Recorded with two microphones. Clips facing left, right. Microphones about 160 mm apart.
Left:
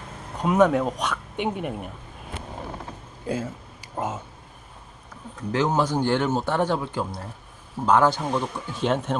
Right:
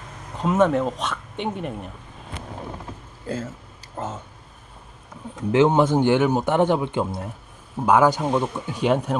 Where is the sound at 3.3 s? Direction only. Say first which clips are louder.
Left 1 dB; 15° left (ahead or behind).